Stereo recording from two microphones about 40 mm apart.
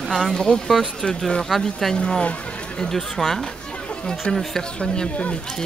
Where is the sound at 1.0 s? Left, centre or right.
Centre.